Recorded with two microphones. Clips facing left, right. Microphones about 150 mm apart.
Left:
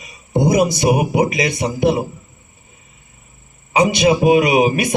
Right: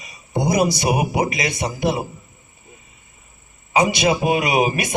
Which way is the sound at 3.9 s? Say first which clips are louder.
Left 5 dB; 55° left (ahead or behind).